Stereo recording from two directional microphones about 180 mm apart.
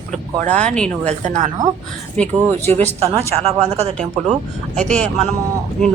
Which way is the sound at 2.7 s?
40° right (ahead or behind).